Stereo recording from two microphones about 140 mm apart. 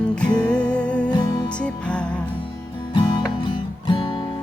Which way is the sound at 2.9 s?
30° left (ahead or behind).